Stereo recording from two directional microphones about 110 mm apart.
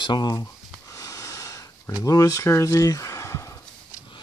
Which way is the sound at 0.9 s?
30° left (ahead or behind).